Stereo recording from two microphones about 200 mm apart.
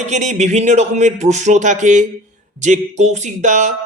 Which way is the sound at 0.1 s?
35° right (ahead or behind).